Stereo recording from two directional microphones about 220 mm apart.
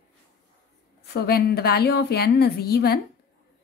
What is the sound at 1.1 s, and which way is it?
A woman's voice, 45° left (ahead or behind).